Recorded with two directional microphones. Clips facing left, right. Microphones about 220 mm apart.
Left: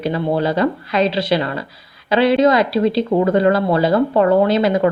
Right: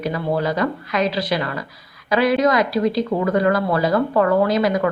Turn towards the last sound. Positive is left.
turn(degrees=25)  # may be behind; listen again after turning